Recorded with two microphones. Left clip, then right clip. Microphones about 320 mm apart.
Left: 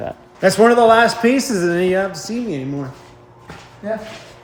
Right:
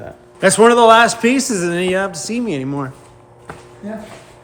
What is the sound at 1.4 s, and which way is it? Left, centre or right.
Speech, left.